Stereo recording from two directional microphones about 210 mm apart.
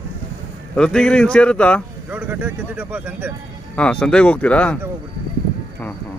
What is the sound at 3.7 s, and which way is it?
Speech, 5° left (ahead or behind).